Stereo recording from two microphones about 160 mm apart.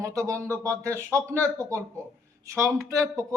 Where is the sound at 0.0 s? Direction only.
20° right (ahead or behind).